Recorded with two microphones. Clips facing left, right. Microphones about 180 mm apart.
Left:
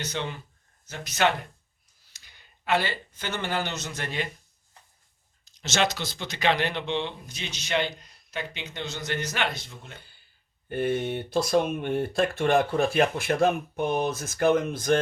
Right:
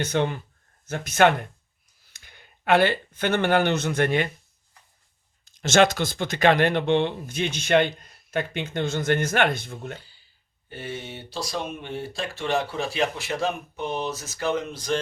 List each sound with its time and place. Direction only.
0.0 s speech: 50° right (ahead or behind)
5.5 s speech: 50° right (ahead or behind)
10.7 s speech: 55° left (ahead or behind)